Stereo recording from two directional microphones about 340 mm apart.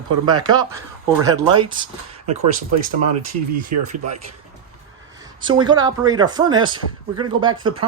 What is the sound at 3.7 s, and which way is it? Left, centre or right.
Speech, right.